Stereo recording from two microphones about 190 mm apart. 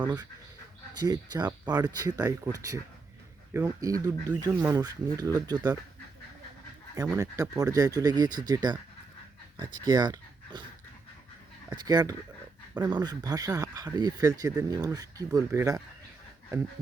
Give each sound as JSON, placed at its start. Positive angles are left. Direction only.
{"t": 0.0, "sound": "speech", "side_deg": -20}
{"t": 6.9, "sound": "speech", "side_deg": -15}
{"t": 11.7, "sound": "speech", "side_deg": -20}